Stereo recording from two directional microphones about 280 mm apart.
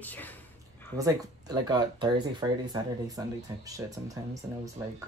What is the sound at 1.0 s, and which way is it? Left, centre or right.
Speech, centre.